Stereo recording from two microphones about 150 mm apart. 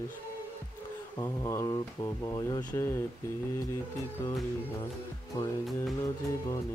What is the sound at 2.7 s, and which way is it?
Speech, 15° left (ahead or behind).